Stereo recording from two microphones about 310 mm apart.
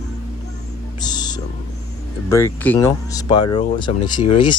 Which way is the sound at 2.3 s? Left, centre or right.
Centre.